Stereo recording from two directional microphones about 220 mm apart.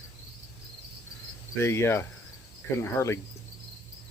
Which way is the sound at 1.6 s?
10° left (ahead or behind).